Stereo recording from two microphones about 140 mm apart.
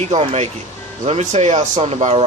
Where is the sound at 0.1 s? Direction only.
45° right (ahead or behind).